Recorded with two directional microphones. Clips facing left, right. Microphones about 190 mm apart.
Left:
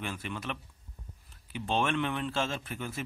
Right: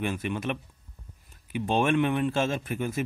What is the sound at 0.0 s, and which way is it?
A man's voice, 15° right (ahead or behind).